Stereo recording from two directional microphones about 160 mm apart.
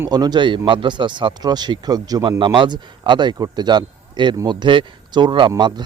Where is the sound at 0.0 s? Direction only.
25° right (ahead or behind).